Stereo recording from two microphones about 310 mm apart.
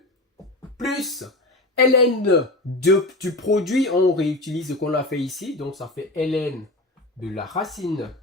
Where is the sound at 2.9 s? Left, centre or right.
Centre.